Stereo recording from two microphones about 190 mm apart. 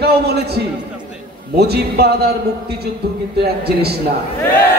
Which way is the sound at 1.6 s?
60° right (ahead or behind).